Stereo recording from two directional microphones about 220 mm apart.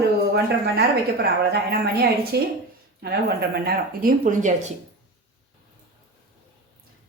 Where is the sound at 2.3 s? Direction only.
45° right (ahead or behind).